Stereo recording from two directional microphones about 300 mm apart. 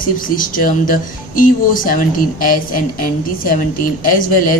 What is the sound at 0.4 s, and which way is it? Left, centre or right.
Speech, left.